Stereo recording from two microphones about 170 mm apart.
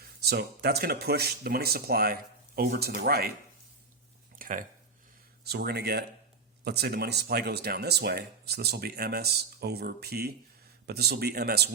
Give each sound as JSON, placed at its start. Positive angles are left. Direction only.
{"t": 0.3, "sound": "speech", "side_deg": -70}
{"t": 4.4, "sound": "a sound", "side_deg": -50}
{"t": 5.4, "sound": "speech", "side_deg": -70}